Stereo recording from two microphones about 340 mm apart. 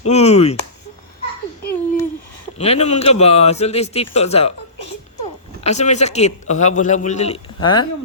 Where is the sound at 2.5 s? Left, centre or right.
Centre.